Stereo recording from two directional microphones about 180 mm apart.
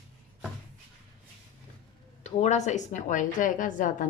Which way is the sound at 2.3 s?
40° left (ahead or behind).